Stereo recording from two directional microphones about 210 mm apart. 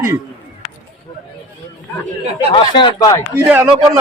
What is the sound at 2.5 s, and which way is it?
Speech, 25° left (ahead or behind).